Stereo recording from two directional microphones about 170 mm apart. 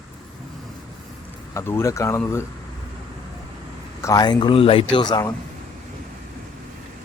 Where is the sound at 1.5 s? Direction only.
15° left (ahead or behind).